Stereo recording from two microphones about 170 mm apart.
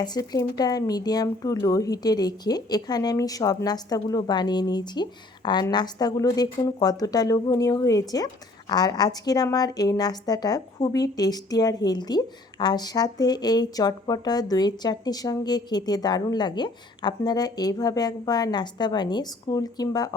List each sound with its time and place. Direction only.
0.0 s a woman's voice: 25° left (ahead or behind)